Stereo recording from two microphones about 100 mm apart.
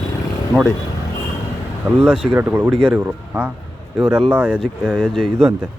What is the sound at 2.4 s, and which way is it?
Speech, 20° right (ahead or behind).